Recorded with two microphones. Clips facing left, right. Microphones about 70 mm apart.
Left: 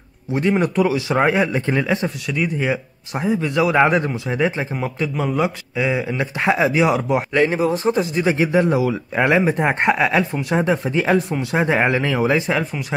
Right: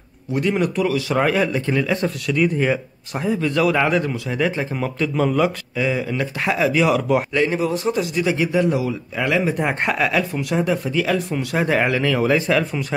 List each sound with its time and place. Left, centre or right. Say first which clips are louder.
0.3 s a man's voice: left 2 dB; left
7.3 s a man's voice: left 2 dB; left
9.4 s a man's voice: left 3 dB; left